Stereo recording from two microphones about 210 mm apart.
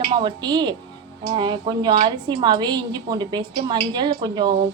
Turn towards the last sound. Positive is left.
turn(degrees=-20)  # may be behind; listen again after turning